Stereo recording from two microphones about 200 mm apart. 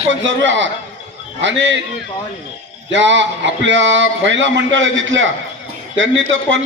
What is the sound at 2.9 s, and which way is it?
A man's voice, 65° right (ahead or behind).